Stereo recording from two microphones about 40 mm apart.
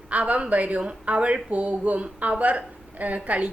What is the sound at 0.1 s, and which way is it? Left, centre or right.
A woman's voice, right.